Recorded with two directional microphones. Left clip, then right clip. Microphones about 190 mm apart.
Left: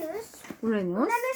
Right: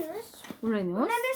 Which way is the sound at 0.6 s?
10° left (ahead or behind).